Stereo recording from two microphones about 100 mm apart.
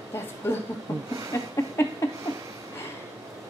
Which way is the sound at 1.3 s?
30° left (ahead or behind).